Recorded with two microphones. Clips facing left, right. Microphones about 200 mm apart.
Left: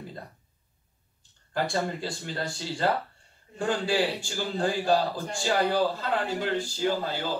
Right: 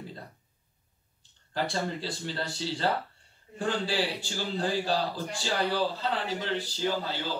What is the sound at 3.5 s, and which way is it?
Speech, 45° left (ahead or behind).